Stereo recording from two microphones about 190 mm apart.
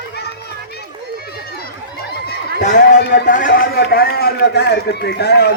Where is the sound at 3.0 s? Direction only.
50° left (ahead or behind).